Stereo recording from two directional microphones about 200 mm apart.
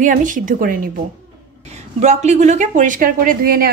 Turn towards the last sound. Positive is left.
turn(degrees=-45)  # may be behind; listen again after turning